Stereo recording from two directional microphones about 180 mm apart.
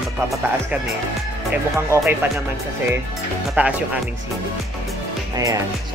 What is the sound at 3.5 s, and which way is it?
Speech, 5° right (ahead or behind).